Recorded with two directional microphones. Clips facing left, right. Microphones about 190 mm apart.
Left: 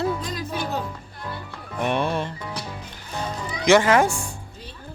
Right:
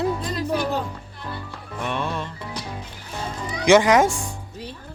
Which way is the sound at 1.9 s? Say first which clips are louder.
Left 4 dB; 15° left (ahead or behind).